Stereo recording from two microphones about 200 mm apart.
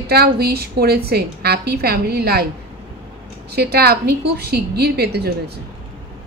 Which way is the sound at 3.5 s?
55° right (ahead or behind).